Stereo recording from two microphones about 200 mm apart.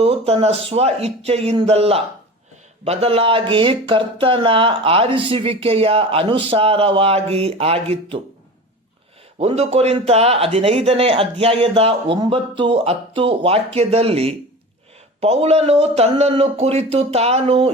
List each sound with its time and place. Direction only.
0.0 s speech: 30° right (ahead or behind)
9.4 s speech: 30° right (ahead or behind)